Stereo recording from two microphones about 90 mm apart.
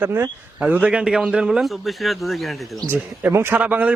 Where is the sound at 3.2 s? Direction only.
25° right (ahead or behind).